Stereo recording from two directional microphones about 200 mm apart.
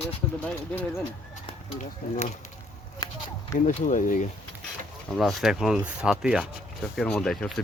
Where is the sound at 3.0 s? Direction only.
20° left (ahead or behind).